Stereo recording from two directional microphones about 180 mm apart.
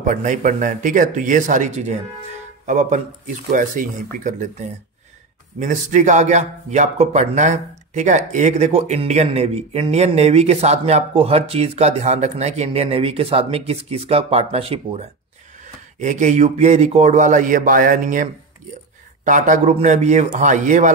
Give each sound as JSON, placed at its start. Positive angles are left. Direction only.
{"t": 0.0, "sound": "a man's voice", "side_deg": -45}
{"t": 16.0, "sound": "a man's voice", "side_deg": -40}